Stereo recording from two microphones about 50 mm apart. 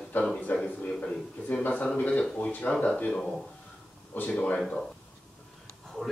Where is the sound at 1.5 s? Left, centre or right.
Left.